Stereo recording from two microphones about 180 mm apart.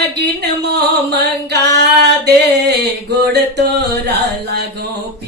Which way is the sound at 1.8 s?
70° right (ahead or behind).